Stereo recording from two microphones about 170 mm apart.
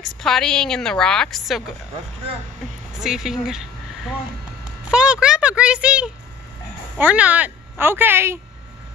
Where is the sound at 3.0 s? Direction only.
5° right (ahead or behind).